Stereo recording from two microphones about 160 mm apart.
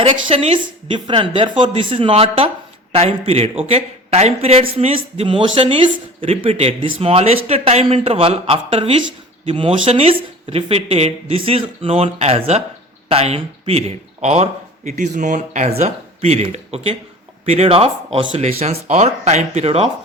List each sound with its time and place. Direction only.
0.0 s speech: 40° right (ahead or behind)